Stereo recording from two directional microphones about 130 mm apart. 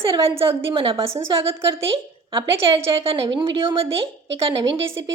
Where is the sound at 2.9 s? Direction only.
45° right (ahead or behind).